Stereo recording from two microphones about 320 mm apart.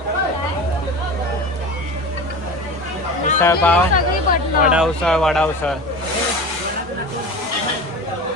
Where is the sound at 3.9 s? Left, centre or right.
Left.